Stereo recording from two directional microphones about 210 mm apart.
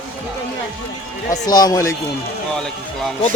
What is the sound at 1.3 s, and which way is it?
Speech, 20° left (ahead or behind).